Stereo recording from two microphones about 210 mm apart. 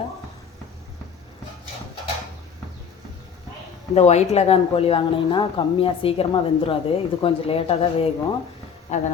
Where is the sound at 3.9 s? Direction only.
30° left (ahead or behind).